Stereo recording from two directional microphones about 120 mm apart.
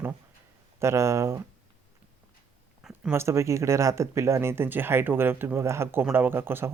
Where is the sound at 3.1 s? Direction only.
20° right (ahead or behind).